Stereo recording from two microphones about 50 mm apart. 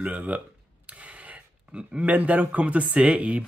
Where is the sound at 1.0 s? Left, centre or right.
Right.